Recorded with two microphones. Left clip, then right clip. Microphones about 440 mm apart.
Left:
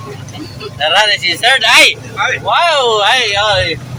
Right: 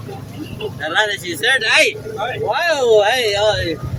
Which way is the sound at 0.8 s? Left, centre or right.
Right.